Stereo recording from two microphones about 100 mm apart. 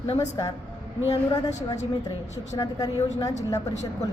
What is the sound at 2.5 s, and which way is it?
A woman's voice, 40° left (ahead or behind).